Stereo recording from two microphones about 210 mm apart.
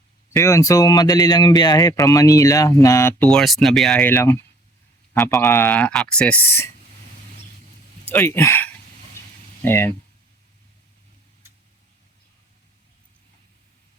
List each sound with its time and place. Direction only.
0.3 s speech: 15° left (ahead or behind)
8.1 s speech: 10° left (ahead or behind)